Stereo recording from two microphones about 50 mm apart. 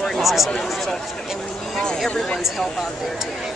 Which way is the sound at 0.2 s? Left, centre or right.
Centre.